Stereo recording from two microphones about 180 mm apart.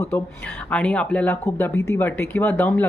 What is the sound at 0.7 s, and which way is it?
Speech, 5° left (ahead or behind).